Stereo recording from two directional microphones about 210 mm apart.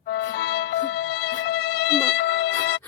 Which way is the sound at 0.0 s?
60° left (ahead or behind).